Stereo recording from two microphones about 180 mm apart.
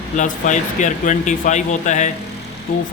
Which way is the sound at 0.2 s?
45° left (ahead or behind).